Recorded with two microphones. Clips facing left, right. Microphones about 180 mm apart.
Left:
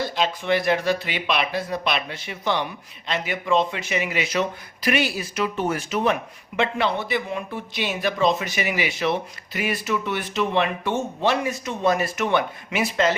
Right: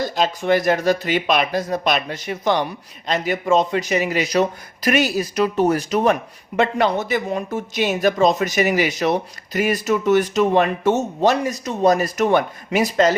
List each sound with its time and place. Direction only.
0.0 s speech: 45° right (ahead or behind)